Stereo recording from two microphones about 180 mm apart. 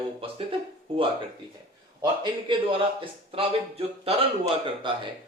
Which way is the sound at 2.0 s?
25° right (ahead or behind).